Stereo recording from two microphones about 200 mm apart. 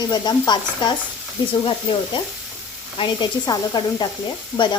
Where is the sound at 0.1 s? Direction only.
20° left (ahead or behind).